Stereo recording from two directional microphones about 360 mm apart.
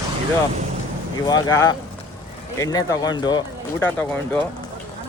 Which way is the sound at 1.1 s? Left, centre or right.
Centre.